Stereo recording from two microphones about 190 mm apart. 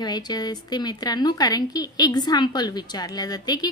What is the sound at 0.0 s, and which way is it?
A woman's voice, 20° left (ahead or behind).